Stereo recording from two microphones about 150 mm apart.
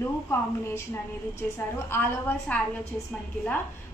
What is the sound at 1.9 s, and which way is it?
A woman's voice, 15° left (ahead or behind).